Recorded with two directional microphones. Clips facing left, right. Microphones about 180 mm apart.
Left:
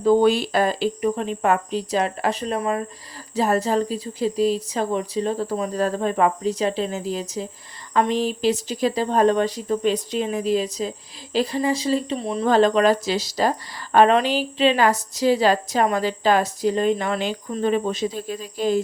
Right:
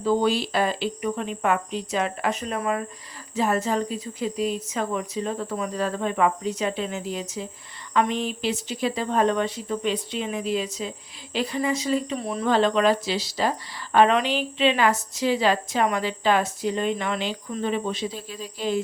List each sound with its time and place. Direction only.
0.0 s a woman's voice: 50° left (ahead or behind); by 12.5 s 25° left (ahead or behind)
12.5 s a woman's voice: 45° left (ahead or behind)